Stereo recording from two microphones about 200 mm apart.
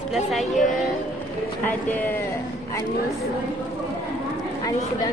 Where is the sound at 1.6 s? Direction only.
10° left (ahead or behind).